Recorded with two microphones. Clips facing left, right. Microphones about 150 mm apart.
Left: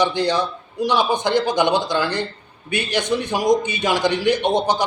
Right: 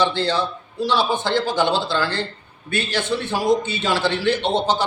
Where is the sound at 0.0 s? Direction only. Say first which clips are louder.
Left 1 dB; 15° left (ahead or behind).